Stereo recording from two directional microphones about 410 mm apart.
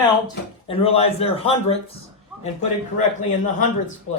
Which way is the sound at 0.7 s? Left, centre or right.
Centre.